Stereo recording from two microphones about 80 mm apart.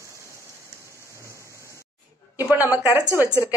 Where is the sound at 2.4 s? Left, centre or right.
Centre.